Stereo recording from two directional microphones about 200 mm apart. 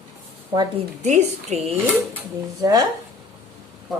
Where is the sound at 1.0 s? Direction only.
35° right (ahead or behind).